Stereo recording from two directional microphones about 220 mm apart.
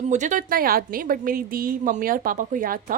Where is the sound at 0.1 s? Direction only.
35° right (ahead or behind).